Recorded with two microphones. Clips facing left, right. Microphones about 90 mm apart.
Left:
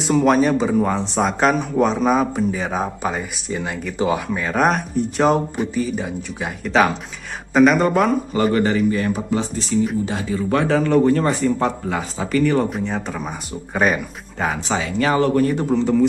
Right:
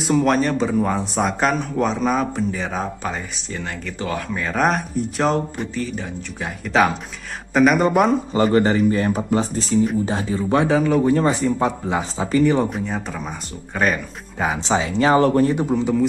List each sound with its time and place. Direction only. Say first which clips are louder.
0.0 s speech: left 2 dB; centre (ahead or behind)
8.5 s speech: right 1 dB; 30° right (ahead or behind)
10.5 s a man's voice: even; 15° right (ahead or behind)
11.9 s speech: right 1 dB; 25° right (ahead or behind)
12.6 s speech: left 1 dB; centre (ahead or behind)
14.7 s speech: right 4 dB; 25° right (ahead or behind)
15.5 s a man's voice: left 2 dB; 10° right (ahead or behind)